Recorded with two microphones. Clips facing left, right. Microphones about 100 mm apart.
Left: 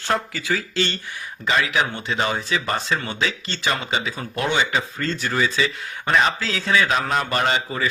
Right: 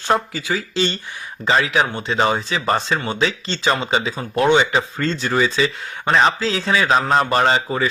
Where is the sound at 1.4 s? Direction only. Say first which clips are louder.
Right 4 dB; 30° right (ahead or behind).